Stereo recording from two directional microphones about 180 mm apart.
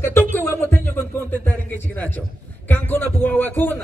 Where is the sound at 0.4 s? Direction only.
10° left (ahead or behind).